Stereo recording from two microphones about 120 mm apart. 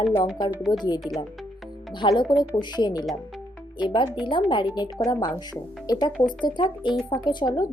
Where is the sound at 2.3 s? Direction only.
40° left (ahead or behind).